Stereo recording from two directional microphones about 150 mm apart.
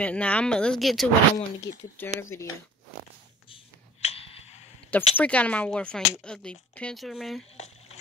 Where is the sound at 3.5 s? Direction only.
40° left (ahead or behind).